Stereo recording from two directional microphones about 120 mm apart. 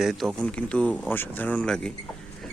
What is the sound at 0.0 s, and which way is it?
Speech, centre (ahead or behind).